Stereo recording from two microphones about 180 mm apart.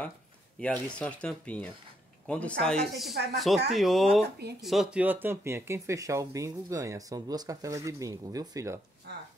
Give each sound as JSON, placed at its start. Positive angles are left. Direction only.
{"t": 0.6, "sound": "a woman's voice", "side_deg": 5}
{"t": 4.2, "sound": "speech", "side_deg": -65}
{"t": 4.6, "sound": "speech", "side_deg": 0}
{"t": 9.1, "sound": "speech", "side_deg": -70}